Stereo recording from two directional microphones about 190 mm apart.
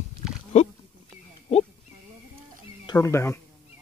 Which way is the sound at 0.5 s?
35° left (ahead or behind).